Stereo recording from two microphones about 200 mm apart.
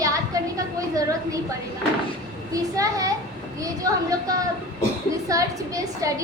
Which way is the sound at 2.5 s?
15° right (ahead or behind).